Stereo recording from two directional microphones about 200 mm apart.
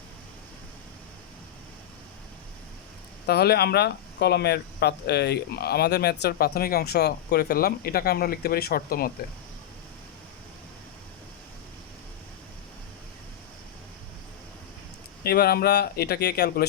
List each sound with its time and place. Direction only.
3.2 s speech: 55° left (ahead or behind)
15.2 s speech: 50° left (ahead or behind)